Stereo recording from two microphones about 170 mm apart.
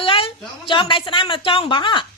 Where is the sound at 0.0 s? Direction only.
30° left (ahead or behind).